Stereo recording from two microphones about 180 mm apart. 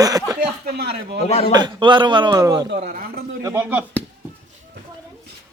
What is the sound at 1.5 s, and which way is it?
A man's voice, 25° right (ahead or behind).